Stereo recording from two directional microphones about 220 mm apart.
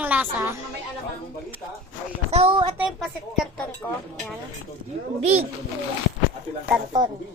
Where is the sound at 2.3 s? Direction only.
25° right (ahead or behind).